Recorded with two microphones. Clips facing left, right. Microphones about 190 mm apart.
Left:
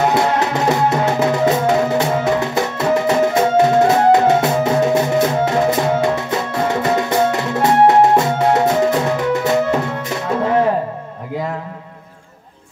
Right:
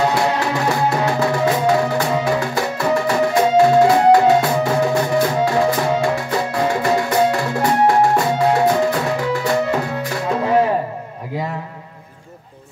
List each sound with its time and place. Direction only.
0.1 s music: 20° left (ahead or behind)